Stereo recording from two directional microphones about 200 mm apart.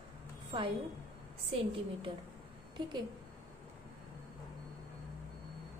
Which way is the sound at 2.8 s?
20° right (ahead or behind).